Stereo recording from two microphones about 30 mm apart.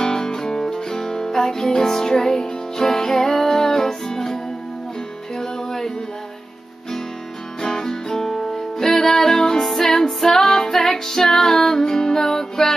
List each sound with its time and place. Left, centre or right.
0.0 s music: left
7.6 s music: centre